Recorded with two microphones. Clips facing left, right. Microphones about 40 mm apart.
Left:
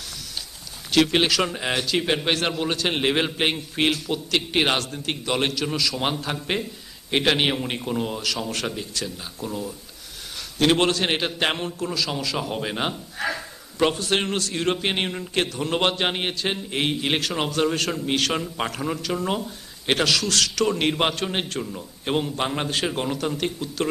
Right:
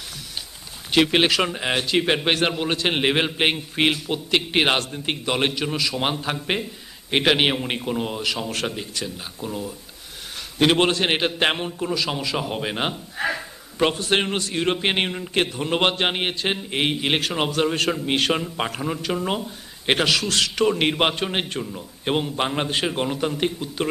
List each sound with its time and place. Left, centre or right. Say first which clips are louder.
0.9 s a man's voice: right 1 dB; right